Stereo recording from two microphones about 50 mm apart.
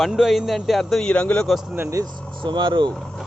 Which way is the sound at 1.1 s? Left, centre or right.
Left.